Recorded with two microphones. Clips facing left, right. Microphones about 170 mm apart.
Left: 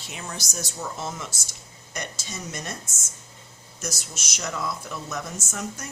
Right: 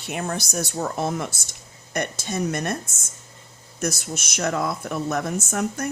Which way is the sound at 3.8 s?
60° right (ahead or behind).